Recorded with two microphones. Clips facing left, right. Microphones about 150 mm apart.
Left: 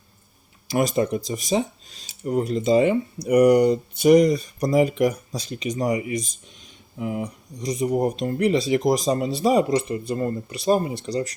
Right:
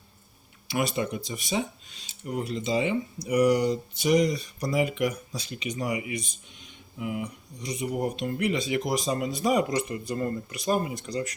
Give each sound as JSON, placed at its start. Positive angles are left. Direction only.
{"t": 0.7, "sound": "speech", "side_deg": 40}